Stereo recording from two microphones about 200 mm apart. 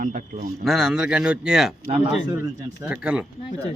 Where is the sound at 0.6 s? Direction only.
Centre (ahead or behind).